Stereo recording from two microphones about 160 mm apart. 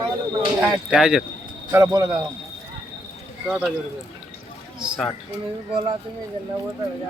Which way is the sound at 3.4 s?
5° right (ahead or behind).